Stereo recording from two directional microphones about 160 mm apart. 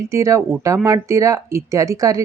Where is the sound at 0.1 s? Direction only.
20° right (ahead or behind).